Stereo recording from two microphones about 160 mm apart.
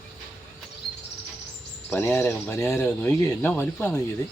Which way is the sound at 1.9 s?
10° left (ahead or behind).